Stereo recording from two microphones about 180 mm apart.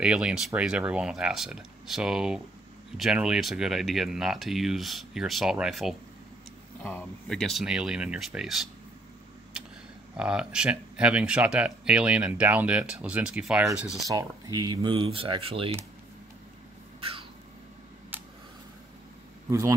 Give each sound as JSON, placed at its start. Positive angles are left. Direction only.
{"t": 0.0, "sound": "speech", "side_deg": -5}
{"t": 6.8, "sound": "speech", "side_deg": 10}
{"t": 10.1, "sound": "speech", "side_deg": -5}
{"t": 14.0, "sound": "speech", "side_deg": -20}
{"t": 17.0, "sound": "a sound", "side_deg": -30}